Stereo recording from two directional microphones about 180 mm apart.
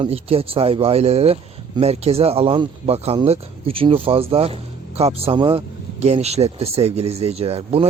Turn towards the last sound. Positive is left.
turn(degrees=-35)  # may be behind; listen again after turning